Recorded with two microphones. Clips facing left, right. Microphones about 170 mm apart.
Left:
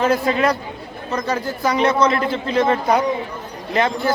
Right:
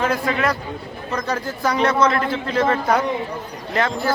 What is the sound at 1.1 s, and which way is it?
A man's voice, 10° left (ahead or behind).